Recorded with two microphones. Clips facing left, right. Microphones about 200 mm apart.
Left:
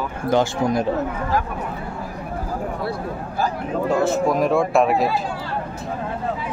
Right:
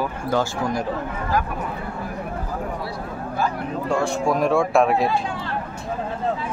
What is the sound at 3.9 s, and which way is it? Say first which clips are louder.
Speech: left 2 dB; centre (ahead or behind).